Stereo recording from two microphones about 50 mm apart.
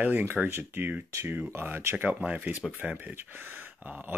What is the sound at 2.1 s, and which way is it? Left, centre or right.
Speech, right.